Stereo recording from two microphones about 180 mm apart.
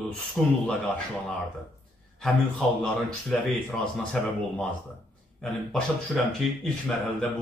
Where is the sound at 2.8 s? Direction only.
Centre (ahead or behind).